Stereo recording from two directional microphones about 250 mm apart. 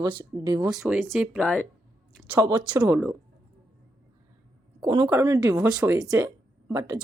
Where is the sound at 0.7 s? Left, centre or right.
Centre.